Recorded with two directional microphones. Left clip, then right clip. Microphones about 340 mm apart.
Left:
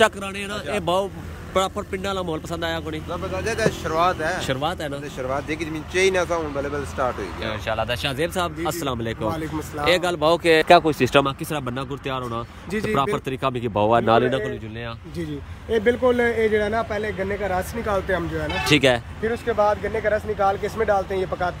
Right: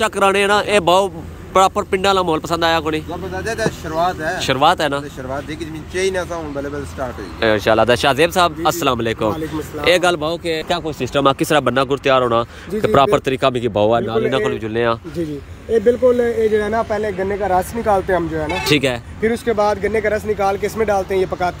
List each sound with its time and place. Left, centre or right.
0.0 s speech: centre
7.3 s speech: centre
11.2 s speech: centre
18.7 s speech: centre
19.2 s speech: right